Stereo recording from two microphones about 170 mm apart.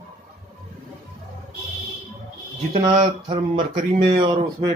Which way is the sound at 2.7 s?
35° right (ahead or behind).